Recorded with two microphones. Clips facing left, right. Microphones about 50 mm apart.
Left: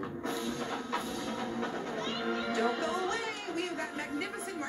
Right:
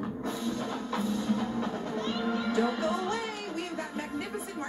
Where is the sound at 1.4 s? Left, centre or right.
Left.